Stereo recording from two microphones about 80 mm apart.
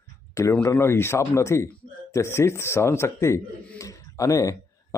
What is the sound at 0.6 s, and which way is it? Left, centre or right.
Speech, left.